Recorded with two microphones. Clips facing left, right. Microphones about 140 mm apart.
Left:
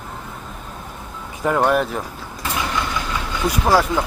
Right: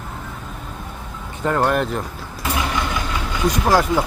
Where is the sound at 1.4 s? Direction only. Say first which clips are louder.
Left 1 dB; 5° left (ahead or behind).